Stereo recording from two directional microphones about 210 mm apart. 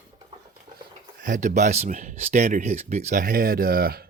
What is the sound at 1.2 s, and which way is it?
Speech, 35° right (ahead or behind).